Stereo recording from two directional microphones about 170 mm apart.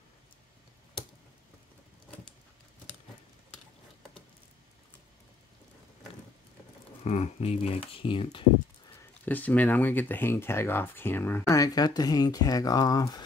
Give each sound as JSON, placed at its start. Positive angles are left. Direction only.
{"t": 7.1, "sound": "speech", "side_deg": 40}
{"t": 9.2, "sound": "speech", "side_deg": 10}